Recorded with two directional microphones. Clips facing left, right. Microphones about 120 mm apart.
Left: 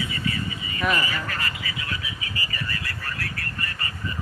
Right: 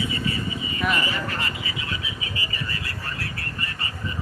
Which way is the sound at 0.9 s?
25° right (ahead or behind).